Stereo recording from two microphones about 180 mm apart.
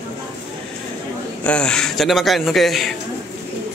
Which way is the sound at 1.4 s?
5° left (ahead or behind).